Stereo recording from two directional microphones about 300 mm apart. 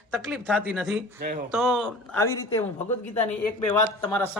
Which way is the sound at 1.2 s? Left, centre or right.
Right.